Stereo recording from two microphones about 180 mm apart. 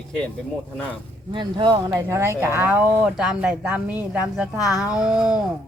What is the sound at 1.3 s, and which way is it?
Speech, 25° right (ahead or behind).